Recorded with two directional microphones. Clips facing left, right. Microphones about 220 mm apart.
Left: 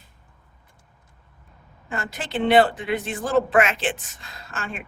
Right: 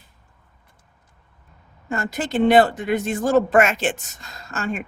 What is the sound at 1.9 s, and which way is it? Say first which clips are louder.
Speech: right 5 dB; 45° right (ahead or behind).